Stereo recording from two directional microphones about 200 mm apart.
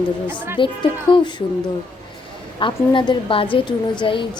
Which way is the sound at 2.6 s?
25° left (ahead or behind).